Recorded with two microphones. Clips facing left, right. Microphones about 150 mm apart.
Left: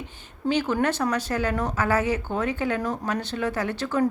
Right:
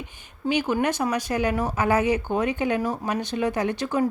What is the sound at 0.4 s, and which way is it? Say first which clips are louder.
Speech: even; 15° right (ahead or behind).